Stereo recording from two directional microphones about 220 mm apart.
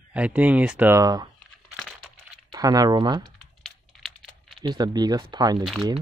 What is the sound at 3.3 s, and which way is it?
Typing, centre (ahead or behind).